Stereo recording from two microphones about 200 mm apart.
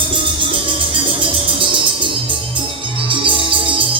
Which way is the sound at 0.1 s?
25° right (ahead or behind).